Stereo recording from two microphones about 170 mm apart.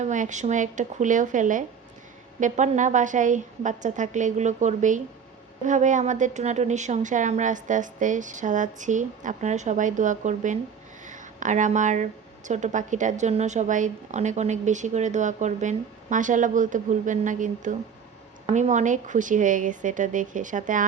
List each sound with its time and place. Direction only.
0.0 s a woman's voice: 45° right (ahead or behind)
11.0 s a sound: 50° right (ahead or behind)
12.5 s a woman's voice: 45° right (ahead or behind)